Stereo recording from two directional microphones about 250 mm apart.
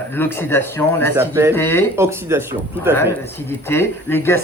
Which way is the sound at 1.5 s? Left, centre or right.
Centre.